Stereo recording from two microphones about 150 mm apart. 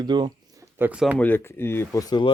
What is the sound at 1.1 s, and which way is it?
Speech, 10° left (ahead or behind).